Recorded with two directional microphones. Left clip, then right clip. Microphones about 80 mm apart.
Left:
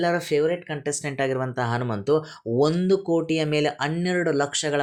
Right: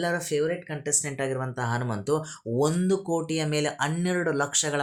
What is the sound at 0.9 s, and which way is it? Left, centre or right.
Speech, left.